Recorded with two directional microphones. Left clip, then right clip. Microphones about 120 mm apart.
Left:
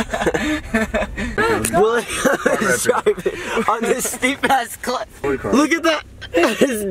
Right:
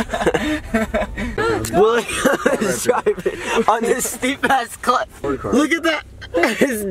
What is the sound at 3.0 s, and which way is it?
Speech, 10° left (ahead or behind).